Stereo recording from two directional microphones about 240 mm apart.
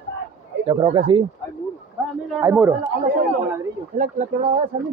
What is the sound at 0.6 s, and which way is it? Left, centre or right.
Speech, right.